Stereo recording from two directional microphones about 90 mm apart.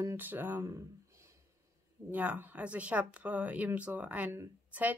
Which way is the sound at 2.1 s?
15° right (ahead or behind).